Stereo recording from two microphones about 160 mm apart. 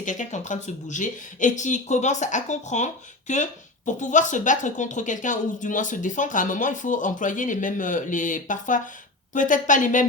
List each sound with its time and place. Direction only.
0.0 s speech: 50° left (ahead or behind)